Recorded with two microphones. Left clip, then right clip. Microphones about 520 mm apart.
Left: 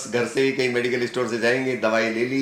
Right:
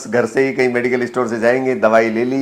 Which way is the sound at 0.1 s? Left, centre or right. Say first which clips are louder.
Right 6 dB; centre.